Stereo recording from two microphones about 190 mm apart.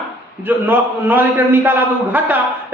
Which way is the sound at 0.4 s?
10° right (ahead or behind).